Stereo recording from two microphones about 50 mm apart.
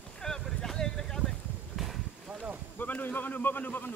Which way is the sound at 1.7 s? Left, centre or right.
Centre.